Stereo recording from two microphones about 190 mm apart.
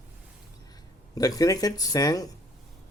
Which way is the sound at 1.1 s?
20° left (ahead or behind).